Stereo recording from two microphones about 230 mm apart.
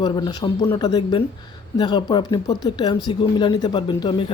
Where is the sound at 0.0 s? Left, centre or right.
Centre.